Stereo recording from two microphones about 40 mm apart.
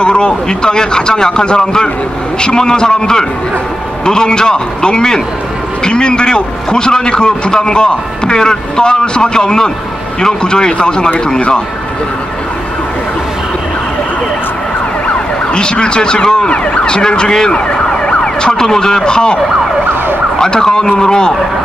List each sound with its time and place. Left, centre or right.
0.0 s a man's voice: left
15.5 s a man's voice: left
16.7 s ambulance: left
20.3 s speech: centre